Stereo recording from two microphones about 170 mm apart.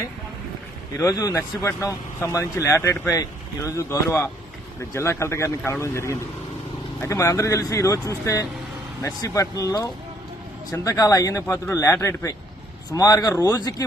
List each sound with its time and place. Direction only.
0.9 s speech: 20° left (ahead or behind)